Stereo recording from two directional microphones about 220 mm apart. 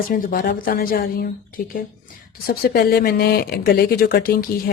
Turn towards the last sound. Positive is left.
turn(degrees=40)  # may be behind; listen again after turning